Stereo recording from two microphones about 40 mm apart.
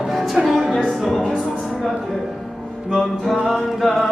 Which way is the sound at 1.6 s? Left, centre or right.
Centre.